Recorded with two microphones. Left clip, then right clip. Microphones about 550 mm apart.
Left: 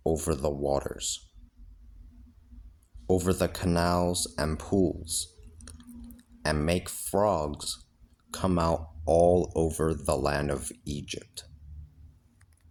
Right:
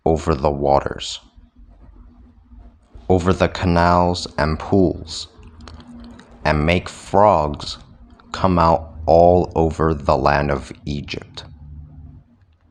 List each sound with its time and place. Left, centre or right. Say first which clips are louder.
0.0 s speech: right 11 dB; left
3.1 s speech: right 10 dB; left